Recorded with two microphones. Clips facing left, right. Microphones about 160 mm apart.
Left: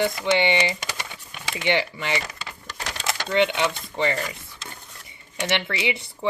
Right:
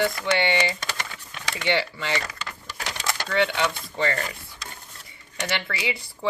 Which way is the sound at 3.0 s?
20° left (ahead or behind).